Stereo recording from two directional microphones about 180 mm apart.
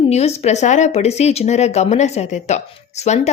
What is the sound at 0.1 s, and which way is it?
A woman's voice, 35° left (ahead or behind).